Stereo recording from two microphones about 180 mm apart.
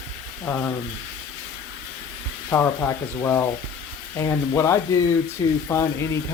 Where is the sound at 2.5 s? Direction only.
15° left (ahead or behind).